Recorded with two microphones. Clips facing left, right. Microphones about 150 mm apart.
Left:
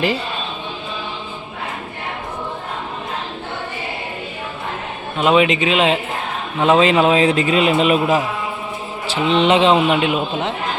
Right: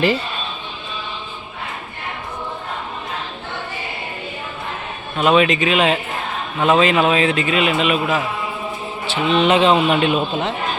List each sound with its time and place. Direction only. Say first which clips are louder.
5.1 s a man's voice: even; 20° left (ahead or behind); by 8.0 s 35° left (ahead or behind)
9.0 s a man's voice: left 1 dB; 25° left (ahead or behind)